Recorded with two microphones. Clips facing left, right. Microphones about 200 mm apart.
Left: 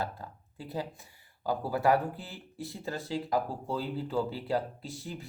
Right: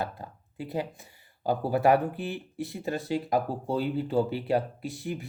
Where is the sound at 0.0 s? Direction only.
20° right (ahead or behind).